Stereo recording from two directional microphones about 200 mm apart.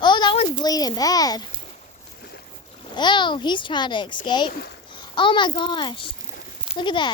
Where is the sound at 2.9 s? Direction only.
20° left (ahead or behind).